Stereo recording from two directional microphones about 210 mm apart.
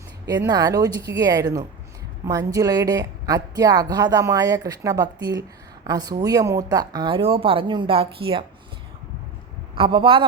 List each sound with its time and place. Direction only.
0.3 s a woman's voice: 20° right (ahead or behind)
9.7 s a woman's voice: 25° right (ahead or behind)